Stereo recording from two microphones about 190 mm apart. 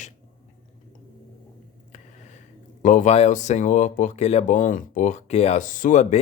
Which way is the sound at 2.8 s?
40° left (ahead or behind).